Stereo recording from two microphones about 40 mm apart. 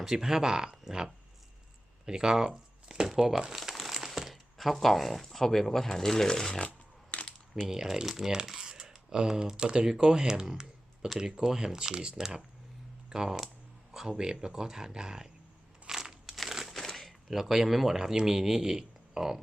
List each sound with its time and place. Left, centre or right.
0.0 s speech: centre
3.5 s crumpling: centre
4.0 s speech: centre
6.7 s a sound: left
7.7 s speech: centre
10.4 s computer keyboard: centre
11.2 s speech: centre
15.9 s crunch: centre
16.6 s speech: centre